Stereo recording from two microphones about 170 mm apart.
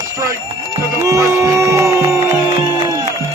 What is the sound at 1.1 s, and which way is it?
Music, 20° right (ahead or behind).